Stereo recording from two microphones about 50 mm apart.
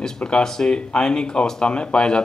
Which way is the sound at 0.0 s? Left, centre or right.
Centre.